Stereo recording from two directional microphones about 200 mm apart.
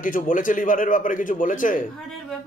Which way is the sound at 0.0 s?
40° left (ahead or behind).